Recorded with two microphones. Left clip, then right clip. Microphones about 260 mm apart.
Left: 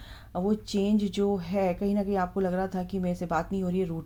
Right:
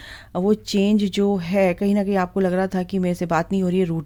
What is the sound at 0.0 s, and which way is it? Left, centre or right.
Speech, right.